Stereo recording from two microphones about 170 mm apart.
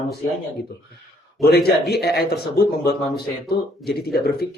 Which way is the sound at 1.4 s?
65° left (ahead or behind).